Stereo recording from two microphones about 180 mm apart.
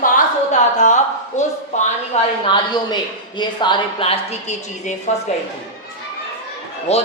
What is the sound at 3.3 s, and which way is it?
A woman's voice, 25° left (ahead or behind).